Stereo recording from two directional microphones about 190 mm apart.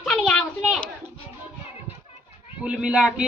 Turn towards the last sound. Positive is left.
turn(degrees=-5)  # may be behind; listen again after turning